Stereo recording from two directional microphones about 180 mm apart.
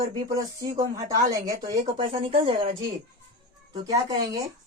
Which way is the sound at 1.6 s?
35° right (ahead or behind).